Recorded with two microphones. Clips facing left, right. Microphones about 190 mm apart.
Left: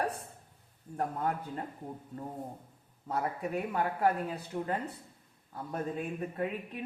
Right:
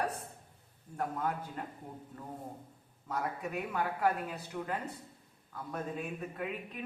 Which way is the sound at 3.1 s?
30° left (ahead or behind).